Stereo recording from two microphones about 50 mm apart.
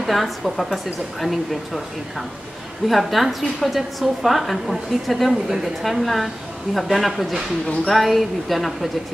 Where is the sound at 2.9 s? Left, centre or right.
Centre.